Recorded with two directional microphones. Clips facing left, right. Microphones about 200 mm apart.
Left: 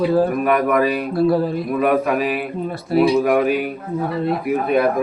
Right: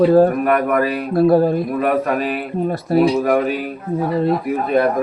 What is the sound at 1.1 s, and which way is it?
Speech, 50° right (ahead or behind).